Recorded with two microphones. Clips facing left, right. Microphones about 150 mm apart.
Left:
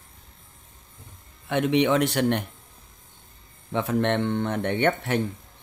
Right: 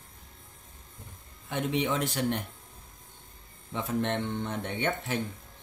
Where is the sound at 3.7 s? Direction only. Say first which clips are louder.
Left 6 dB; 75° left (ahead or behind).